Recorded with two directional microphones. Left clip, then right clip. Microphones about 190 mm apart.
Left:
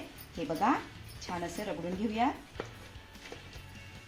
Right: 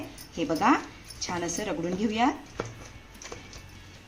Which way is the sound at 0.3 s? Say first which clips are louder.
Right 6 dB; 20° left (ahead or behind).